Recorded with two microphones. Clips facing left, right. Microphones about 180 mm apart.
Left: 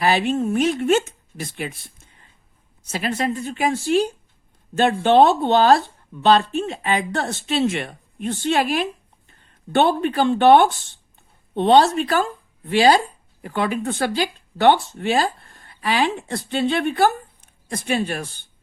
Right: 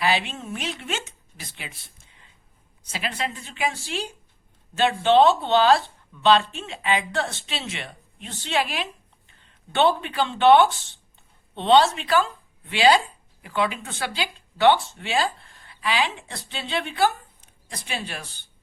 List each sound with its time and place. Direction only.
0.0 s speech: 45° left (ahead or behind)
2.9 s speech: 40° left (ahead or behind)